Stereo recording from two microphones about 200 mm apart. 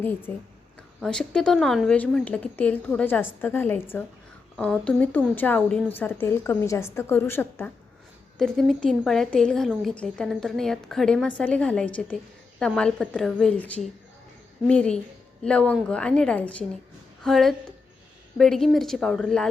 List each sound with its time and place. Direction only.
0.0 s a woman's voice: 10° left (ahead or behind)